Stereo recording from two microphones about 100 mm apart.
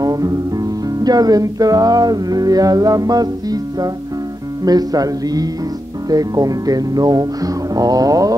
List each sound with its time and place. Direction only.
0.0 s music: 35° right (ahead or behind)